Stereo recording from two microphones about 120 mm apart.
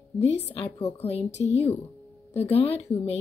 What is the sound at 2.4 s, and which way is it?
Speech, 60° left (ahead or behind).